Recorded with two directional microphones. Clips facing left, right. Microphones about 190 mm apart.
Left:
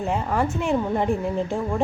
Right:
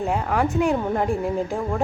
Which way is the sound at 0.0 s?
Centre (ahead or behind).